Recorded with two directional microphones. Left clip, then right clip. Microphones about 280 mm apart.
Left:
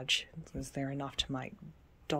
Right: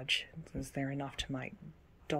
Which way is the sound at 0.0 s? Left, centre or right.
Centre.